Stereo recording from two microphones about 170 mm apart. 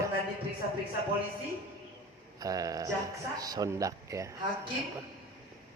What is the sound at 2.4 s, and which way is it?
Speech, 20° right (ahead or behind).